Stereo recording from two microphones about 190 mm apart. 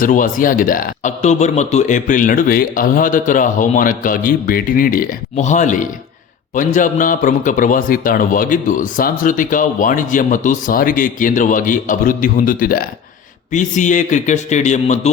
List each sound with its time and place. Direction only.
0.0 s a man's voice: 45° left (ahead or behind)